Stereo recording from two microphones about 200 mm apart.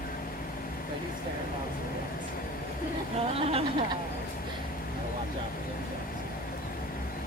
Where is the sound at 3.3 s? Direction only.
30° right (ahead or behind).